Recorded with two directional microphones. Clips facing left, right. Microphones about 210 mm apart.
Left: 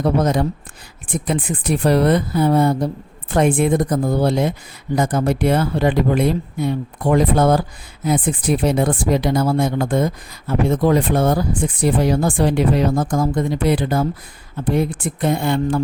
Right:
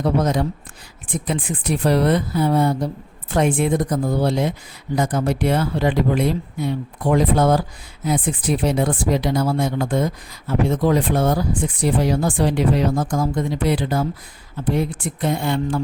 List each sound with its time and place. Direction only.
0.0 s speech: 50° left (ahead or behind)